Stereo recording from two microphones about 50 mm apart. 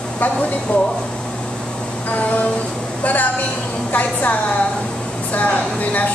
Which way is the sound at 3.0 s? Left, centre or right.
Left.